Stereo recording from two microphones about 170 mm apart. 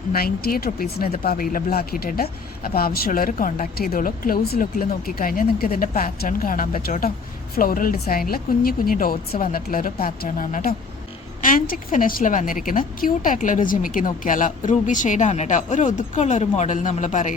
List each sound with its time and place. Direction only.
0.1 s a woman's voice: 65° left (ahead or behind); by 17.3 s 45° left (ahead or behind)